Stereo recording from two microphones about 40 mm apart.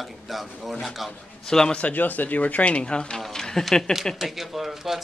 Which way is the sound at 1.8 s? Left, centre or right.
Left.